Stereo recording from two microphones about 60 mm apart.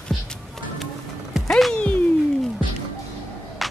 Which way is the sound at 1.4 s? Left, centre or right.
Centre.